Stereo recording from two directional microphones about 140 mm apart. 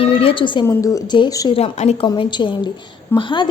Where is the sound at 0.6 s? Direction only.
20° left (ahead or behind).